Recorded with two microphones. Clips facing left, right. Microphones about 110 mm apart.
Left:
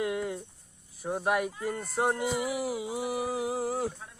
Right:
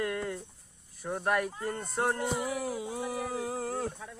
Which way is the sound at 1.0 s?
10° left (ahead or behind).